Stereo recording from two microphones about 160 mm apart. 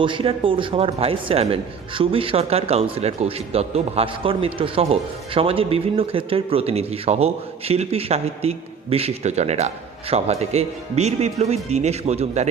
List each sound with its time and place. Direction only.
0.0 s speech: 30° right (ahead or behind)